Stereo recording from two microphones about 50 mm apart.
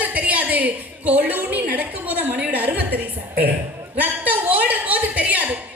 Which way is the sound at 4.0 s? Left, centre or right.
Right.